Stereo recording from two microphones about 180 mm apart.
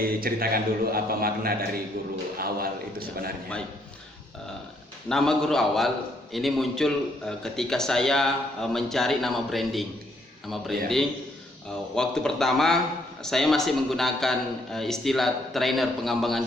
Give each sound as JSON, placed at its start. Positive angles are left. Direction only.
{"t": 0.0, "sound": "a man's voice", "side_deg": -55}
{"t": 5.0, "sound": "a man's voice", "side_deg": 0}